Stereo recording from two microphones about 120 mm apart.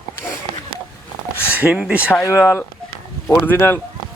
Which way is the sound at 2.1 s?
20° left (ahead or behind).